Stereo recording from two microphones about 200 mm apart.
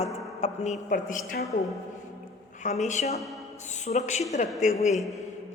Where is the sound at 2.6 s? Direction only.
35° left (ahead or behind).